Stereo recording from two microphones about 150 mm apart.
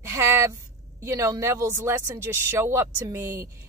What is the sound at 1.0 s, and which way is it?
Speech, 20° right (ahead or behind).